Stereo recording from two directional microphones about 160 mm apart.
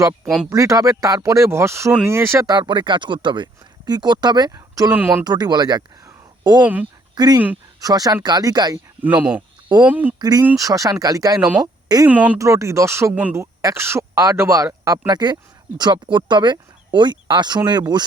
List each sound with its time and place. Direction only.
0.5 s speech: 20° right (ahead or behind)
4.9 s speech: 10° right (ahead or behind)
5.2 s speech: 25° right (ahead or behind)
6.6 s speech: 10° right (ahead or behind)
7.8 s speech: 25° right (ahead or behind)
9.0 s speech: 10° right (ahead or behind)
10.2 s speech: 25° right (ahead or behind)
11.3 s speech: 5° right (ahead or behind); by 18.0 s 25° right (ahead or behind)